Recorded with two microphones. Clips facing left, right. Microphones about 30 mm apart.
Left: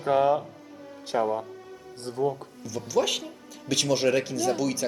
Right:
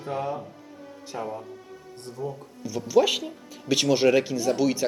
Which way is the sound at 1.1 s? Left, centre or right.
Left.